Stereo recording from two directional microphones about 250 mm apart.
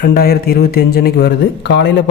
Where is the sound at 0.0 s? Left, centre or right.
Left.